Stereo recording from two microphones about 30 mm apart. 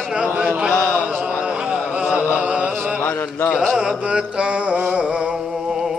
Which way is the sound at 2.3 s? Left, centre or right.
Right.